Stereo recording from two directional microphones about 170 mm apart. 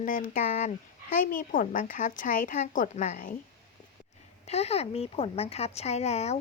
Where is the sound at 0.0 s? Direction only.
50° left (ahead or behind).